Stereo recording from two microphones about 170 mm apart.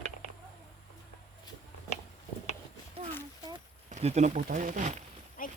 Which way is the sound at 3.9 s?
40° right (ahead or behind).